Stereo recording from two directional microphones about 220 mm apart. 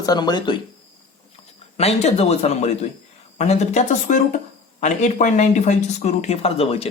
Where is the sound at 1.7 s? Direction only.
30° left (ahead or behind).